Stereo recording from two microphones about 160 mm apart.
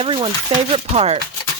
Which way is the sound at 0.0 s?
35° right (ahead or behind).